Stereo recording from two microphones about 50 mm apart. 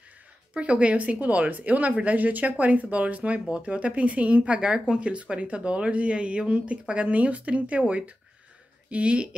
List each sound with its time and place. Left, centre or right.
0.6 s speech: right